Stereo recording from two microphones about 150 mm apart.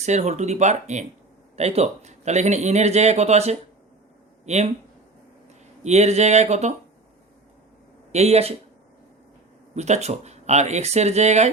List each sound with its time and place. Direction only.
0.0 s speech: 50° right (ahead or behind)
5.8 s speech: 45° right (ahead or behind)
8.1 s speech: 45° right (ahead or behind)
9.7 s speech: 50° right (ahead or behind)